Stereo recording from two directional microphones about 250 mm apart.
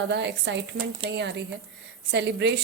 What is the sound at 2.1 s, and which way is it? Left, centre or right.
Speech, right.